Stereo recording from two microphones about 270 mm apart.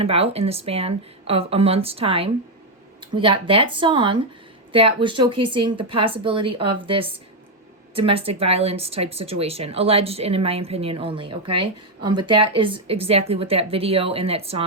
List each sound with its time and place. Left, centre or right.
0.0 s speech: right